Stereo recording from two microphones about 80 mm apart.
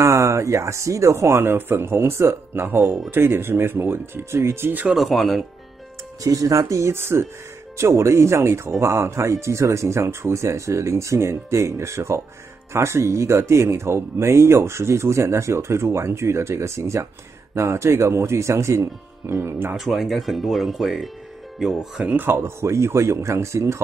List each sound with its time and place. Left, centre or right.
0.0 s speech: right
4.9 s speech: centre
6.2 s speech: right
19.8 s speech: centre
22.0 s speech: right